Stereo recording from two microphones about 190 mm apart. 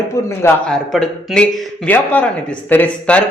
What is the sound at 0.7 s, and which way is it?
A man's voice, 5° left (ahead or behind).